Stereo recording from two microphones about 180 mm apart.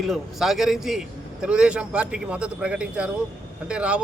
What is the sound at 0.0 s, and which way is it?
A man's voice, centre (ahead or behind).